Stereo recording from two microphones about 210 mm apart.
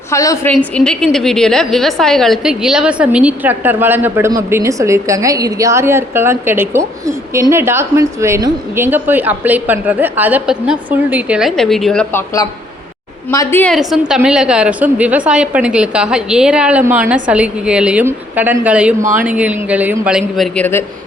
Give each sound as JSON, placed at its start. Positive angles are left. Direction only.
{"t": 0.1, "sound": "a woman's voice", "side_deg": 15}
{"t": 0.5, "sound": "a woman's voice", "side_deg": 5}